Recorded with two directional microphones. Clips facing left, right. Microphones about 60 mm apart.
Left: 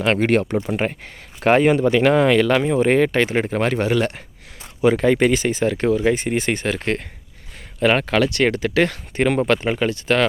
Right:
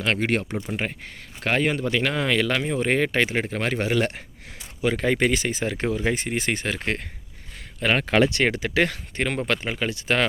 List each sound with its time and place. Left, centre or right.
0.2 s speech: left
1.5 s speech: left
2.4 s speech: centre
3.7 s speech: centre
4.8 s speech: centre
8.1 s speech: centre
9.1 s speech: centre
9.9 s speech: centre